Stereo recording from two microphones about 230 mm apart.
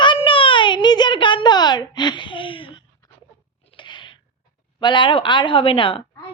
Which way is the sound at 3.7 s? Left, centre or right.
Left.